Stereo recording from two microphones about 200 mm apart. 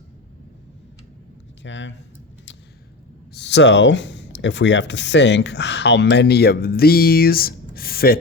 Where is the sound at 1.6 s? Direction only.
65° left (ahead or behind).